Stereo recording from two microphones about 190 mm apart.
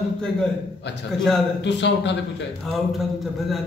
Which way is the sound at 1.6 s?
65° left (ahead or behind).